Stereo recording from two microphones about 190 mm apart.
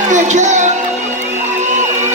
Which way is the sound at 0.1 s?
40° right (ahead or behind).